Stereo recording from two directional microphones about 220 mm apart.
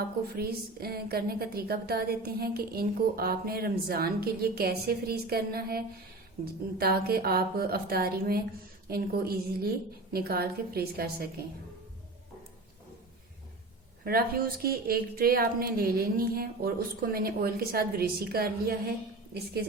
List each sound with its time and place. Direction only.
0.3 s a woman's voice: 45° right (ahead or behind)
14.0 s a woman's voice: 45° right (ahead or behind)